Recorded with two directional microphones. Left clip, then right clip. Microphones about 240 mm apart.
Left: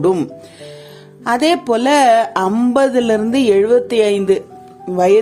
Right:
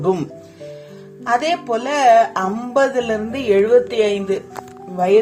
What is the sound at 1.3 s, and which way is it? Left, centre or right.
Speech, left.